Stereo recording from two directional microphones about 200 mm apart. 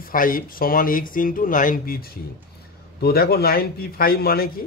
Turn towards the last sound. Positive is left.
turn(degrees=50)  # may be behind; listen again after turning